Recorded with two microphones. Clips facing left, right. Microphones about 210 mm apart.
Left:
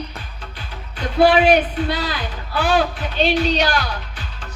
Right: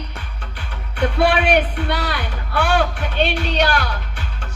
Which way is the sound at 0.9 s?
70° right (ahead or behind).